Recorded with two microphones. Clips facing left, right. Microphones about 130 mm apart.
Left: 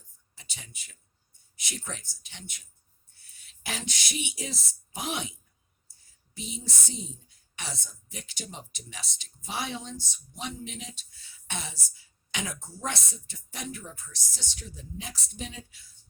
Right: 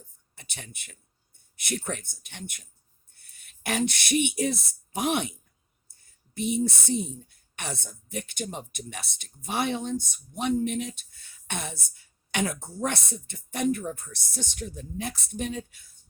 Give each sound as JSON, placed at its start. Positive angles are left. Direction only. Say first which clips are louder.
{"t": 0.3, "sound": "speech", "louder": "right 5 dB", "side_deg": -60}